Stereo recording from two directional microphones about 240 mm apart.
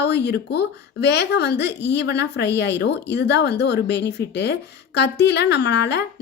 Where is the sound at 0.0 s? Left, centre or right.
Left.